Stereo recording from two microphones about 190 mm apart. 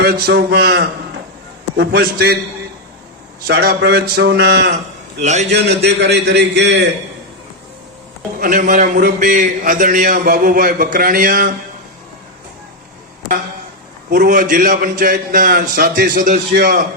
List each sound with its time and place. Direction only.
0.0 s a man's voice: 55° right (ahead or behind)
3.4 s a man's voice: 55° right (ahead or behind)
5.2 s a man's voice: 40° right (ahead or behind)
5.5 s a man's voice: 65° right (ahead or behind)
8.4 s a man's voice: 45° right (ahead or behind)
14.1 s a man's voice: 45° right (ahead or behind)